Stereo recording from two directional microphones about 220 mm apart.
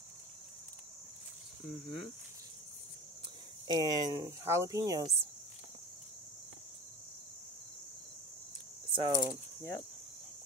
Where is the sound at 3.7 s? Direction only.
20° right (ahead or behind).